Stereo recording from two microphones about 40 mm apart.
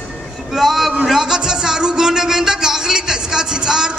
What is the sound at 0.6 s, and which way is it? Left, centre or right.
Speech, centre.